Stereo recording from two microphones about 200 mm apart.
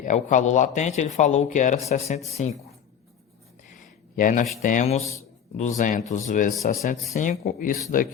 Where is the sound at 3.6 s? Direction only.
40° left (ahead or behind).